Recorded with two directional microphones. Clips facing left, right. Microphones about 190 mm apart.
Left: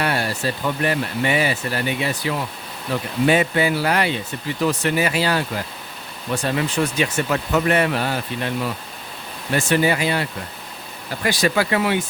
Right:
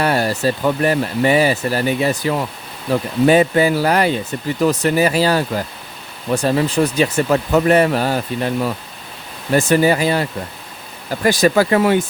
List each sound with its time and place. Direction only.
0.0 s speech: 40° right (ahead or behind)